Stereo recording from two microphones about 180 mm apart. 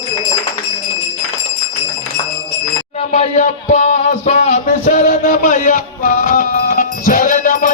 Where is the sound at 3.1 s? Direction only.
40° left (ahead or behind).